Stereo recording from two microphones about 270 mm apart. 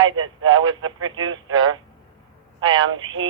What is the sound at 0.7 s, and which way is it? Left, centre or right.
Speech, right.